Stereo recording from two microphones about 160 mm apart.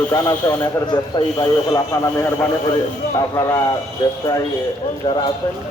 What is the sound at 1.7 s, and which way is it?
Speech, 15° left (ahead or behind).